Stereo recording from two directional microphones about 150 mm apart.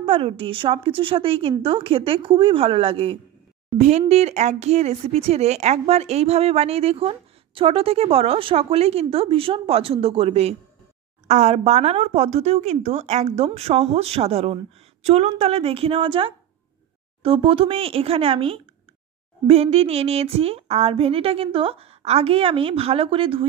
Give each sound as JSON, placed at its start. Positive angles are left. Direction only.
{"t": 0.0, "sound": "a woman's voice", "side_deg": -40}